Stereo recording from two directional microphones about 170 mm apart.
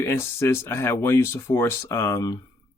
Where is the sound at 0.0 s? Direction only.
15° left (ahead or behind).